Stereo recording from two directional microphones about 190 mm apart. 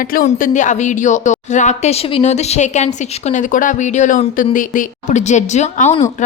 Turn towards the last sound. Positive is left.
turn(degrees=40)  # may be behind; listen again after turning